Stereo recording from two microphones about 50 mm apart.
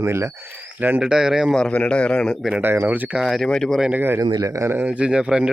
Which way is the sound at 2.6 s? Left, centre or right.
Right.